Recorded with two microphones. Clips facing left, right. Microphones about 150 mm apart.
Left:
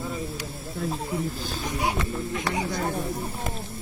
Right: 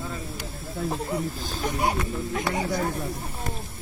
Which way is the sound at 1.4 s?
45° right (ahead or behind).